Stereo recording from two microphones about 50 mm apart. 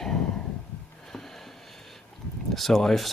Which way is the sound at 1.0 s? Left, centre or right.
Centre.